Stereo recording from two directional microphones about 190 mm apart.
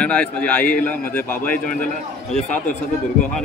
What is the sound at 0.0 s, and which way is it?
A man's voice, 5° left (ahead or behind).